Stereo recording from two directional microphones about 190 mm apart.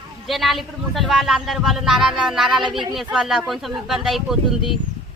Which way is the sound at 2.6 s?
25° right (ahead or behind).